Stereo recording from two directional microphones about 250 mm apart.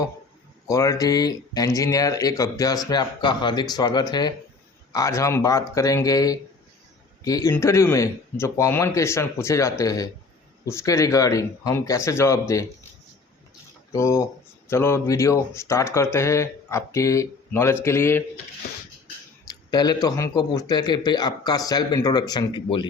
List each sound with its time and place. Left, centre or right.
0.7 s speech: centre
13.9 s speech: centre
19.5 s speech: centre